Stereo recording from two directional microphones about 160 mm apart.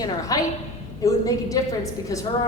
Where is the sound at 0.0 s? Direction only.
20° left (ahead or behind).